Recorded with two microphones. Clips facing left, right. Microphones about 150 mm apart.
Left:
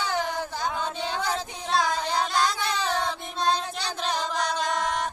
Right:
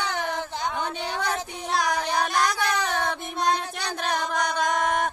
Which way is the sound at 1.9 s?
65° right (ahead or behind).